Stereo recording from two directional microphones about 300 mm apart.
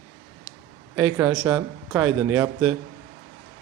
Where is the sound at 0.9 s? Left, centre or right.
Centre.